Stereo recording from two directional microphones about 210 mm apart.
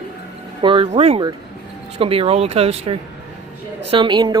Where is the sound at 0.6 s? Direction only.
25° right (ahead or behind).